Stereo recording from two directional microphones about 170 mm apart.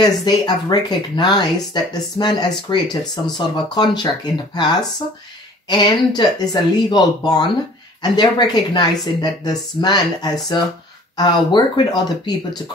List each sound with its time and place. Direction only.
0.0 s speech: 25° left (ahead or behind)